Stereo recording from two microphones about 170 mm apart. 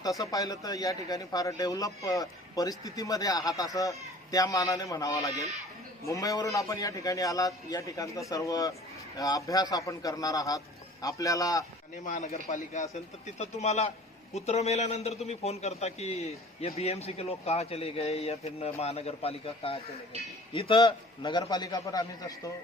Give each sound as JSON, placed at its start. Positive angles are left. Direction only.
{"t": 0.2, "sound": "a man's voice", "side_deg": 20}
{"t": 12.0, "sound": "a man's voice", "side_deg": 45}